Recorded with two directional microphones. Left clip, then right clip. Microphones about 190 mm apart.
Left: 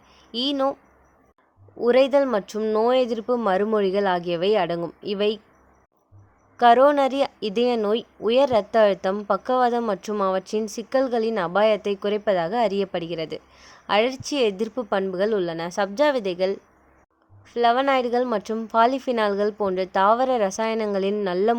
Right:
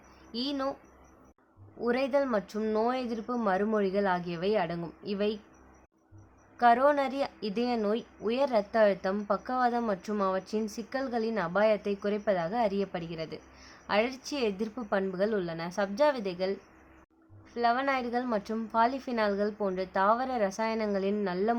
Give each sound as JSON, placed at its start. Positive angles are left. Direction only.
{"t": 0.3, "sound": "a woman's voice", "side_deg": 40}
{"t": 1.8, "sound": "a woman's voice", "side_deg": 40}
{"t": 6.6, "sound": "a woman's voice", "side_deg": 40}